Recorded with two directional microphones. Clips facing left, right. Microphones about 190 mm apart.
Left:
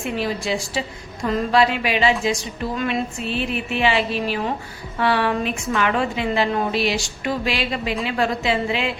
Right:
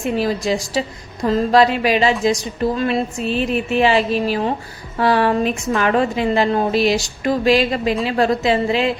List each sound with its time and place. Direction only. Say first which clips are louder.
0.0 s a woman's voice: right 5 dB; 40° right (ahead or behind)